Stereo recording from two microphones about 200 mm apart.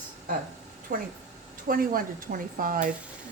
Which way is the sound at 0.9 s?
45° right (ahead or behind).